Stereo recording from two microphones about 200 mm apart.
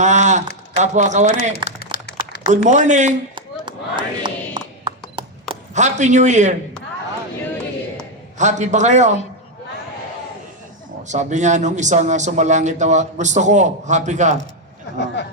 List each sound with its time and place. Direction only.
0.0 s speech: 35° right (ahead or behind)
1.8 s a sound: 55° left (ahead or behind)
2.5 s a man's voice: 35° right (ahead or behind)
3.3 s chop: 25° right (ahead or behind)
5.7 s a man's voice: 35° right (ahead or behind)
8.4 s a man's voice: 35° right (ahead or behind)
11.1 s a man's voice: 35° right (ahead or behind)
14.9 s speech: 60° left (ahead or behind)